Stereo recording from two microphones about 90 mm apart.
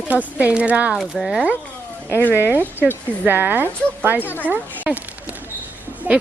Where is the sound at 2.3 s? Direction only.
25° right (ahead or behind).